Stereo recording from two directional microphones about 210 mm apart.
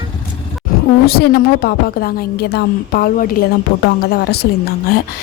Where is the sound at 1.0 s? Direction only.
50° left (ahead or behind).